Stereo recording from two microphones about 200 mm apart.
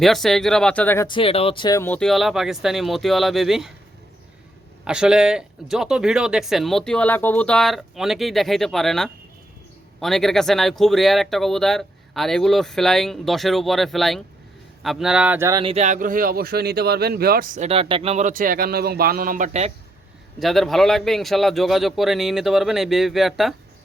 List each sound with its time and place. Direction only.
0.0 s speech: centre (ahead or behind)
1.0 s speech: 25° left (ahead or behind); by 3.7 s centre (ahead or behind)
4.9 s speech: 5° right (ahead or behind)
15.6 s speech: 35° right (ahead or behind)
20.4 s speech: centre (ahead or behind)